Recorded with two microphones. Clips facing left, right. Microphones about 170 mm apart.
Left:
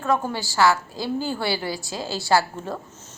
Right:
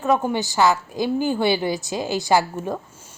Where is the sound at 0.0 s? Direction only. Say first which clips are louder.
Right 4 dB; 20° right (ahead or behind).